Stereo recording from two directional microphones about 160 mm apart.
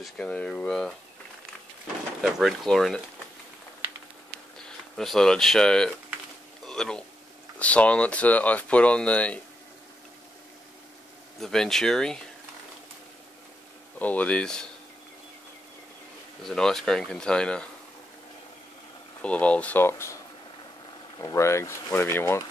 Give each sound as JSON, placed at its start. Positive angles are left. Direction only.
{"t": 0.0, "sound": "speech", "side_deg": 5}
{"t": 2.2, "sound": "speech", "side_deg": 0}
{"t": 4.6, "sound": "speech", "side_deg": 5}
{"t": 6.6, "sound": "a sound", "side_deg": 5}
{"t": 7.5, "sound": "speech", "side_deg": 10}
{"t": 11.3, "sound": "speech", "side_deg": 5}
{"t": 13.9, "sound": "speech", "side_deg": 10}
{"t": 16.4, "sound": "speech", "side_deg": 5}
{"t": 19.2, "sound": "speech", "side_deg": 10}
{"t": 21.2, "sound": "speech", "side_deg": 20}